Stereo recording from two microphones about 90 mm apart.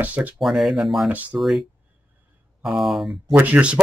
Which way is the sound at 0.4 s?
Centre (ahead or behind).